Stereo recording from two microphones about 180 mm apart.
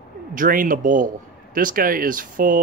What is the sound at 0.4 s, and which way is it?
A man's voice, 50° right (ahead or behind).